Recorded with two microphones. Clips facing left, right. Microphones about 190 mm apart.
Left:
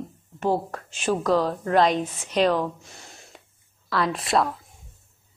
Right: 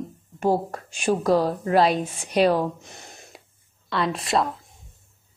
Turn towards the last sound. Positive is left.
turn(degrees=0)  # may be behind; listen again after turning